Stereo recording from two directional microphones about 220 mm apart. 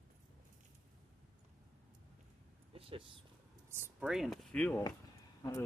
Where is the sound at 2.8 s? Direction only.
25° right (ahead or behind).